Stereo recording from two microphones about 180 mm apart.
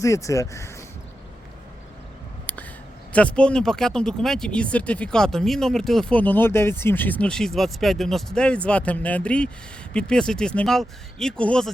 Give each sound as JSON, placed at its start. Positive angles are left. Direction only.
{"t": 0.0, "sound": "speech", "side_deg": 15}
{"t": 3.1, "sound": "speech", "side_deg": 5}